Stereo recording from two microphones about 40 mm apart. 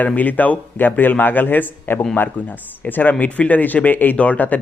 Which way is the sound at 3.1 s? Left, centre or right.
Left.